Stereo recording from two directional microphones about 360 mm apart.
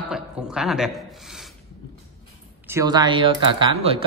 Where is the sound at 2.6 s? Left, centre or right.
Centre.